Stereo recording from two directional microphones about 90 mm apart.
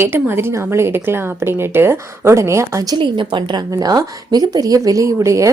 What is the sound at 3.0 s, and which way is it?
A woman's voice, 65° right (ahead or behind).